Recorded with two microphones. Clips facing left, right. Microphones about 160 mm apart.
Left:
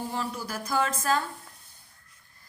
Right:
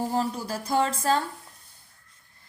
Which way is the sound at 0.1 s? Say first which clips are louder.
Right 5 dB; 35° right (ahead or behind).